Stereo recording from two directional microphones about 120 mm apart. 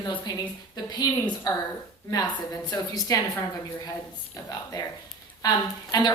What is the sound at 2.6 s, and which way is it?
Speech, 30° left (ahead or behind).